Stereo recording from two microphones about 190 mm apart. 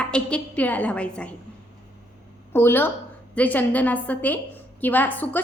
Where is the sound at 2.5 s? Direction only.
10° left (ahead or behind).